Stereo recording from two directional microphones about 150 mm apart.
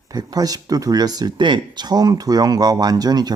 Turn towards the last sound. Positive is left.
turn(degrees=-25)  # may be behind; listen again after turning